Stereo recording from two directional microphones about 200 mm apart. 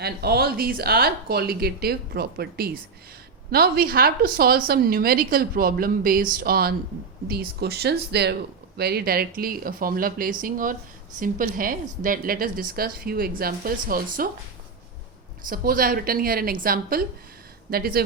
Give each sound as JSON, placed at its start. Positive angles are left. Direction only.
{"t": 0.0, "sound": "a woman's voice", "side_deg": -50}
{"t": 15.4, "sound": "a woman's voice", "side_deg": -45}